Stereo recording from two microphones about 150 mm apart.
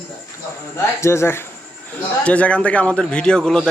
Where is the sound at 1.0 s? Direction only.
15° left (ahead or behind).